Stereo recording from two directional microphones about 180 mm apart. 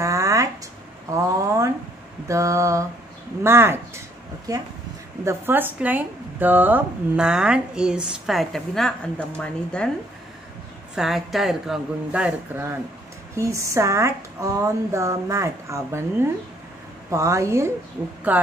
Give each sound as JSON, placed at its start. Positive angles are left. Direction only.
{"t": 0.0, "sound": "a sound", "side_deg": -20}
{"t": 1.1, "sound": "a woman's voice", "side_deg": -15}
{"t": 11.0, "sound": "a woman's voice", "side_deg": 0}